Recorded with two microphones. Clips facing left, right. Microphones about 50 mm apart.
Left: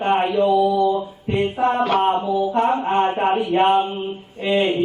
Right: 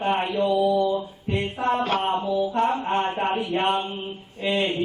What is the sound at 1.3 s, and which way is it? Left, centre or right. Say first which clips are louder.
Mantra: left 6 dB; centre.